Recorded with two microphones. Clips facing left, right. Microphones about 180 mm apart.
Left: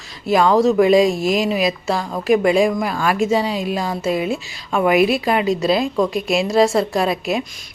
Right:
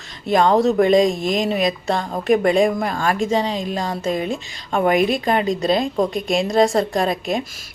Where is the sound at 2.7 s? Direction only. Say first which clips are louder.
Left 1 dB; 45° right (ahead or behind).